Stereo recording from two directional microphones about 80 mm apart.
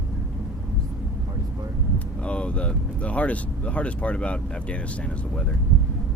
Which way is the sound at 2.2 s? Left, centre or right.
Centre.